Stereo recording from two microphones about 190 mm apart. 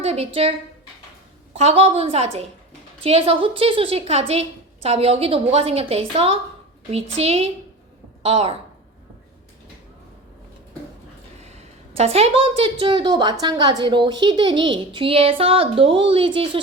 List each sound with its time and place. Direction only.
0.0 s a woman's voice: 30° right (ahead or behind)
1.5 s a woman's voice: 35° right (ahead or behind)
11.3 s a woman's voice: 35° right (ahead or behind)